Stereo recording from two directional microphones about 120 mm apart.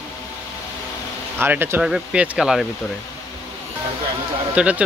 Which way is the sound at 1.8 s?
5° right (ahead or behind).